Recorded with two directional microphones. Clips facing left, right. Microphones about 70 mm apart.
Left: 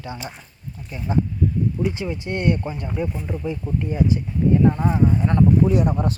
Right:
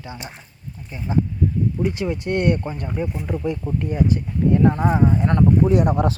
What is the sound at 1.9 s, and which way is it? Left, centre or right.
Speech, right.